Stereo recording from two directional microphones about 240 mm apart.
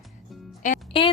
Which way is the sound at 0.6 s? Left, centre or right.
Left.